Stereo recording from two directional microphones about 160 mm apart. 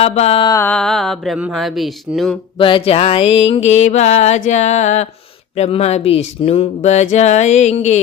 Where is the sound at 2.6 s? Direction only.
30° left (ahead or behind).